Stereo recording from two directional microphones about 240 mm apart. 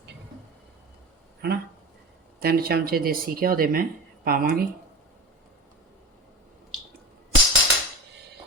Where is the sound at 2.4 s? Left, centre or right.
Right.